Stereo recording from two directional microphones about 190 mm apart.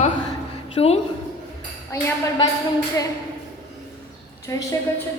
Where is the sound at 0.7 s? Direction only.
30° left (ahead or behind).